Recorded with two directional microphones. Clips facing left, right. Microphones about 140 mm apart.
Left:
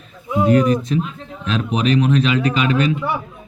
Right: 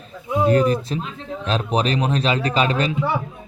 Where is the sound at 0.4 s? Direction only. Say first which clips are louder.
Left 2 dB; 35° right (ahead or behind).